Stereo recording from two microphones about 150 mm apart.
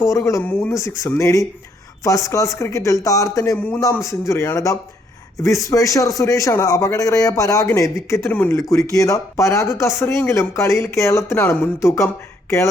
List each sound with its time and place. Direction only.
0.0 s speech: 20° left (ahead or behind)
8.5 s speech: 20° left (ahead or behind)